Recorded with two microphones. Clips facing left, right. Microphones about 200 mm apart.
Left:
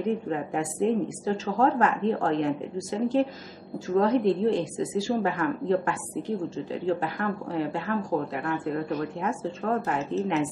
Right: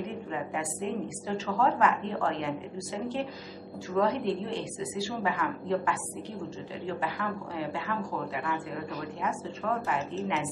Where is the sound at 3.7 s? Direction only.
45° left (ahead or behind).